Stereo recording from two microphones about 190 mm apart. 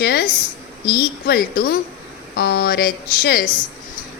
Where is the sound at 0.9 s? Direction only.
55° left (ahead or behind).